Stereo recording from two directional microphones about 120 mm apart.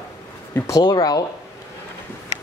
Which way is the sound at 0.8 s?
35° left (ahead or behind).